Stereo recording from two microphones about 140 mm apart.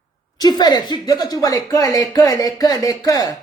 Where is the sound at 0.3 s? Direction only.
30° left (ahead or behind).